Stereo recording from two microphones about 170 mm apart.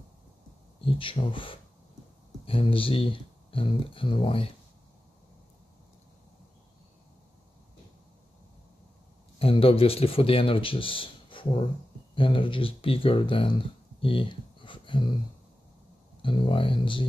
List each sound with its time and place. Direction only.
0.7 s speech: 30° left (ahead or behind)
9.4 s speech: 35° left (ahead or behind)
16.2 s speech: 30° left (ahead or behind)